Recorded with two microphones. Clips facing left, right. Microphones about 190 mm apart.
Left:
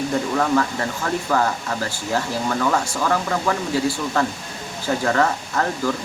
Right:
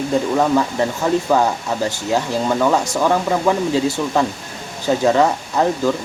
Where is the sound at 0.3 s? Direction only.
15° right (ahead or behind).